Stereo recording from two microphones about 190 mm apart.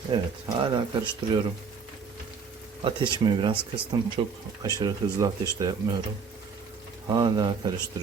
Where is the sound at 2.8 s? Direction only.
25° right (ahead or behind).